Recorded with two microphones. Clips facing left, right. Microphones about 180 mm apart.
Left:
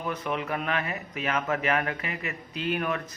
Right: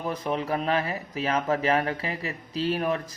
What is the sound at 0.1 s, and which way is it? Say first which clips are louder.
Speech: right 3 dB; 35° right (ahead or behind).